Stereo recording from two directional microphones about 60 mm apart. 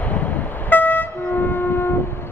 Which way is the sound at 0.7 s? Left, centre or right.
Left.